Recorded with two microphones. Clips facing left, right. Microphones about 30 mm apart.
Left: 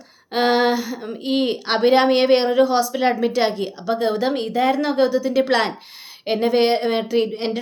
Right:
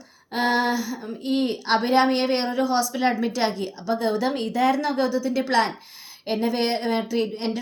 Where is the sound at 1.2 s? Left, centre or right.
Left.